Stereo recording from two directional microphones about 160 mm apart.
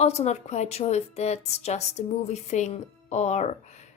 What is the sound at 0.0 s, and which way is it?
Speech, 40° left (ahead or behind).